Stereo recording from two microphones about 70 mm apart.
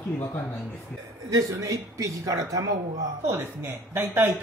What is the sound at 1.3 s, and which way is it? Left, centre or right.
A man's voice, right.